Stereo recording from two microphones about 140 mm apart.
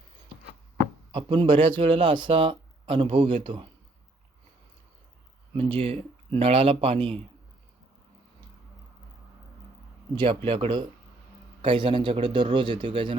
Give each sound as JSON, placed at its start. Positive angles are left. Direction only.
{"t": 1.1, "sound": "speech", "side_deg": -40}
{"t": 5.5, "sound": "speech", "side_deg": -40}
{"t": 10.2, "sound": "speech", "side_deg": -40}